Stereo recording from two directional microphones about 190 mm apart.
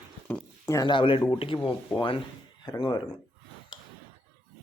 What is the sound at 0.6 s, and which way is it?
Speech, 20° left (ahead or behind).